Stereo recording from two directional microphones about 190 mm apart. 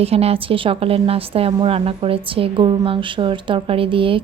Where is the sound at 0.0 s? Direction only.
30° right (ahead or behind).